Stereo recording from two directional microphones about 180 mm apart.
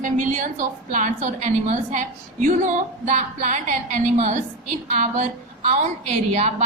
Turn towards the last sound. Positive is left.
turn(degrees=-40)  # may be behind; listen again after turning